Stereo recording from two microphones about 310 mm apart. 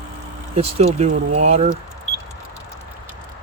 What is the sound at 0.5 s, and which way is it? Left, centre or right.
Speech, centre.